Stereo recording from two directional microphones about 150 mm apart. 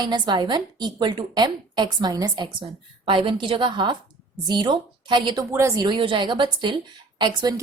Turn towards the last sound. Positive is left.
turn(degrees=-30)  # may be behind; listen again after turning